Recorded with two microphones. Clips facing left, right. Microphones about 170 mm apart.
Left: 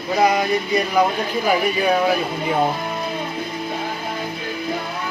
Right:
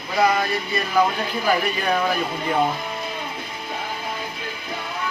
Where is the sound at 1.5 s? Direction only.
10° left (ahead or behind).